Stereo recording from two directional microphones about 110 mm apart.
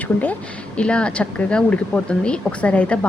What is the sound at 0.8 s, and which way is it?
Speech, 10° left (ahead or behind).